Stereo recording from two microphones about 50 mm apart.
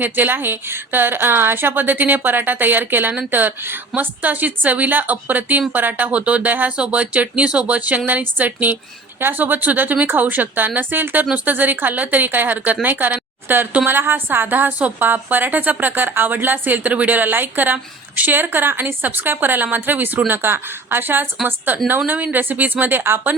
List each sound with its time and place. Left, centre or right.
0.0 s a woman's voice: right